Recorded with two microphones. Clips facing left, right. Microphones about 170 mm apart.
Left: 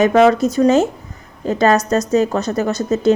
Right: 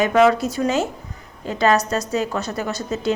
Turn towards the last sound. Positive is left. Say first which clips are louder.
# left 8 dB
turn(degrees=45)  # may be behind; listen again after turning